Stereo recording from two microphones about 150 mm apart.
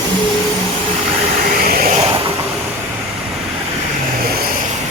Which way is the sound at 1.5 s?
75° right (ahead or behind).